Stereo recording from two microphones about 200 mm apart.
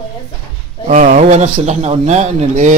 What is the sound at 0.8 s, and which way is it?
Speech, 35° right (ahead or behind).